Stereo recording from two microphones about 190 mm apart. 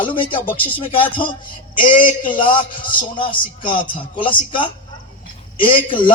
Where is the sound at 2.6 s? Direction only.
25° left (ahead or behind).